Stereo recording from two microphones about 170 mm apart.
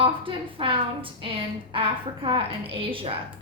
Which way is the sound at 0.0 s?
30° right (ahead or behind).